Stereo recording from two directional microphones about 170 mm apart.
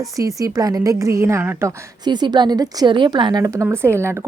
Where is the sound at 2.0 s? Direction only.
25° right (ahead or behind).